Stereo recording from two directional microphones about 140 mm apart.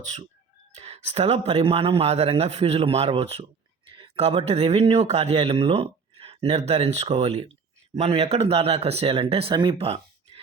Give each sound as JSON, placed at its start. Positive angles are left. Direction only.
{"t": 0.8, "sound": "speech", "side_deg": -50}